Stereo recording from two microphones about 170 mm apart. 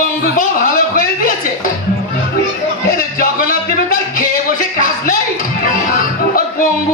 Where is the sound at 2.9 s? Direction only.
55° left (ahead or behind).